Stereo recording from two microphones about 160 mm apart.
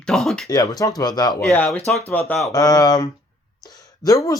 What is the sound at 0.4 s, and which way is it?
Speech, 25° left (ahead or behind).